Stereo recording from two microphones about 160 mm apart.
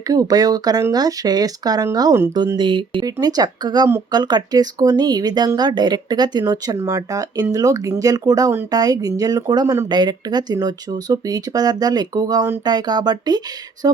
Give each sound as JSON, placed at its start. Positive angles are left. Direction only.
{"t": 0.1, "sound": "speech", "side_deg": -25}